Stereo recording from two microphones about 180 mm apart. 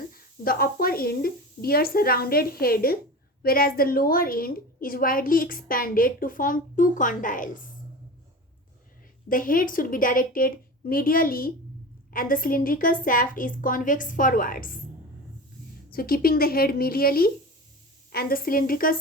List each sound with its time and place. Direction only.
0.1 s a woman's voice: 55° left (ahead or behind)
9.3 s a woman's voice: 50° left (ahead or behind)
15.9 s a woman's voice: 55° left (ahead or behind)